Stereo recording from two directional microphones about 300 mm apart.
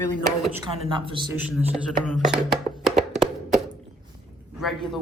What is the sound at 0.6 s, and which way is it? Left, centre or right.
Speech, centre.